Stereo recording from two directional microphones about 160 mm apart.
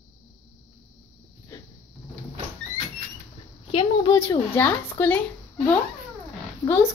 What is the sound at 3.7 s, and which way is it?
Speech, 30° left (ahead or behind).